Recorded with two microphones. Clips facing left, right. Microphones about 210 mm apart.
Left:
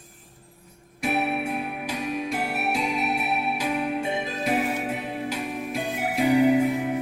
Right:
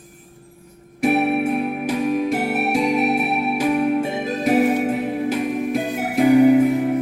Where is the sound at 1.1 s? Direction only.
55° right (ahead or behind).